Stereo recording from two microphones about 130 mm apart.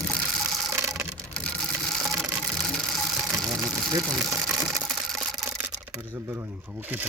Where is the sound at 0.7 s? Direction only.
20° right (ahead or behind).